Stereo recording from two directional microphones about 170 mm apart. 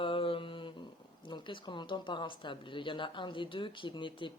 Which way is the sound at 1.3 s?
30° left (ahead or behind).